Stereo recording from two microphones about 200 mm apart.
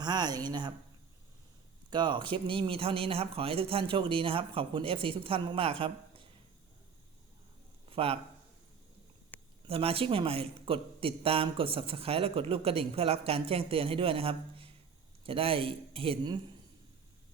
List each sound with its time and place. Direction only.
0.0 s a man's voice: 20° right (ahead or behind)
1.9 s a man's voice: 25° right (ahead or behind)
7.9 s speech: 30° right (ahead or behind)
9.6 s a man's voice: 30° right (ahead or behind)